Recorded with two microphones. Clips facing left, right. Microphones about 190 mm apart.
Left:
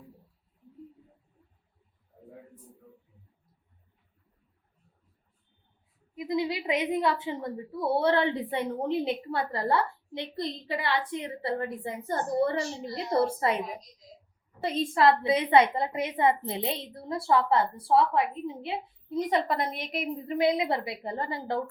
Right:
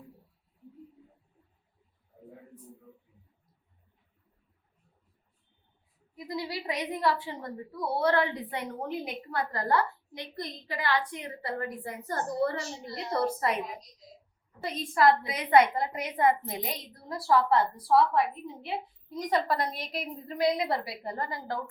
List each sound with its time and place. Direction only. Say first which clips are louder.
6.1 s a woman's voice: left 6 dB; 20° left (ahead or behind)
14.6 s a woman's voice: left 1 dB; 25° left (ahead or behind)